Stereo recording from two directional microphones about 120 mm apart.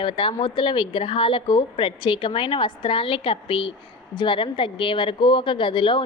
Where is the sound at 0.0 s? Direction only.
45° left (ahead or behind).